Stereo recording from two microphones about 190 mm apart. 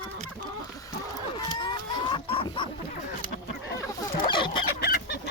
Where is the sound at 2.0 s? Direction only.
25° left (ahead or behind).